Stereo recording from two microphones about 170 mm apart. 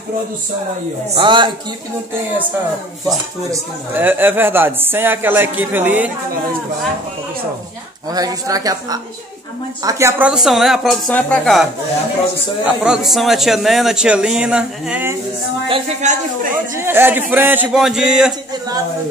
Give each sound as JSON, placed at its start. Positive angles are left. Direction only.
{"t": 1.1, "sound": "speech", "side_deg": -30}
{"t": 3.4, "sound": "a woman's voice", "side_deg": -10}
{"t": 8.1, "sound": "speech", "side_deg": -20}
{"t": 12.8, "sound": "speech", "side_deg": -5}
{"t": 15.7, "sound": "speech", "side_deg": -45}
{"t": 16.7, "sound": "a woman's voice", "side_deg": -15}